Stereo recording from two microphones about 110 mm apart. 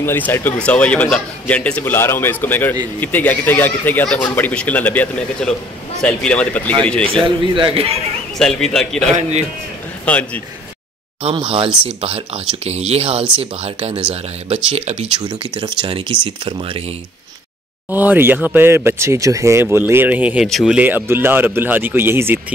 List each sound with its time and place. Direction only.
0.0 s a man's voice: 20° left (ahead or behind)
7.2 s speech: 50° right (ahead or behind)
8.4 s a man's voice: 5° left (ahead or behind)
11.4 s speech: 60° right (ahead or behind)
12.6 s speech: 70° right (ahead or behind)
15.1 s speech: 45° right (ahead or behind)
17.8 s speech: 15° right (ahead or behind)